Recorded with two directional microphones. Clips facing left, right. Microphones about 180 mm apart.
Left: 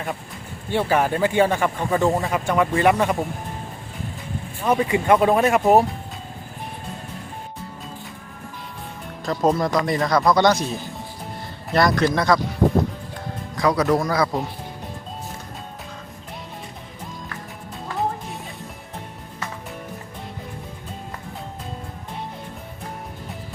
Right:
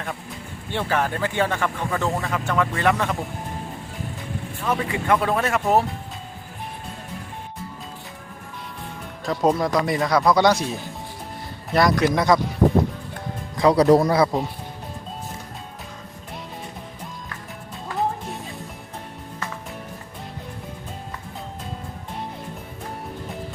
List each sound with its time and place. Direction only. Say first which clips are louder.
0.7 s speech: left 4 dB; 10° left (ahead or behind)
4.6 s speech: left 5 dB; 20° left (ahead or behind)
9.2 s speech: even; centre (ahead or behind)
12.1 s speech: right 1 dB; 20° right (ahead or behind)
13.6 s speech: right 4 dB; 30° right (ahead or behind)